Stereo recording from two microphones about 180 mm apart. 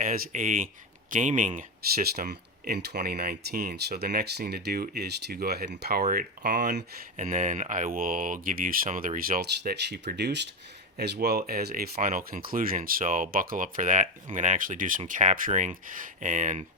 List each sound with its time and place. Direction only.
0.0 s speech: 45° right (ahead or behind); by 6.8 s 65° right (ahead or behind)
7.2 s speech: 45° right (ahead or behind)